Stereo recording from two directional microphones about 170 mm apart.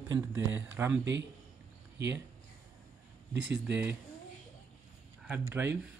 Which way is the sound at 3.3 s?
90° right.